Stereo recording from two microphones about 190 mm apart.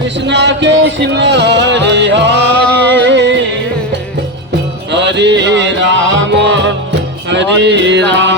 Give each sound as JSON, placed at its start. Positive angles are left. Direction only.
{"t": 0.3, "sound": "music", "side_deg": -65}
{"t": 2.5, "sound": "music", "side_deg": 10}
{"t": 2.9, "sound": "music", "side_deg": -65}
{"t": 4.9, "sound": "music", "side_deg": -65}